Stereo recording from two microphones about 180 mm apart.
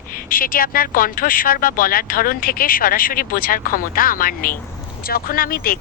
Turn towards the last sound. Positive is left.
turn(degrees=55)  # may be behind; listen again after turning